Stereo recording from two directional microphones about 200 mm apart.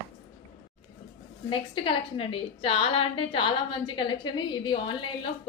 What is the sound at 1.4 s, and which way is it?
A woman's voice, 25° left (ahead or behind).